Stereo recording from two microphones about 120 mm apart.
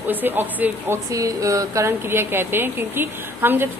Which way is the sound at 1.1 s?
25° right (ahead or behind).